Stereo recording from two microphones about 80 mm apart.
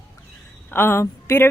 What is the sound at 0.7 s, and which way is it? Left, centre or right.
Speech, left.